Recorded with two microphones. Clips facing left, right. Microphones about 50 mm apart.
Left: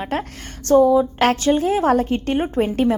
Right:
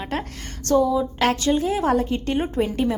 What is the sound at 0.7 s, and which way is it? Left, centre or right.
A woman's voice, left.